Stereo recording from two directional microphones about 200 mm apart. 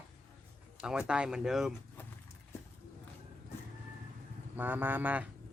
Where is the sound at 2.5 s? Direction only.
15° left (ahead or behind).